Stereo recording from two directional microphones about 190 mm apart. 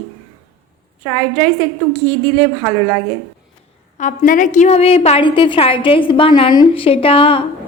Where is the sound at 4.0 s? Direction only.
40° left (ahead or behind).